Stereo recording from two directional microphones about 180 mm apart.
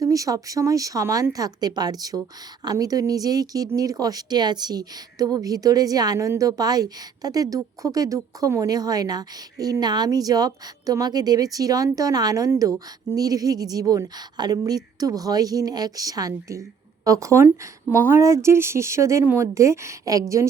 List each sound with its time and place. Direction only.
0.0 s a woman's voice: 20° right (ahead or behind)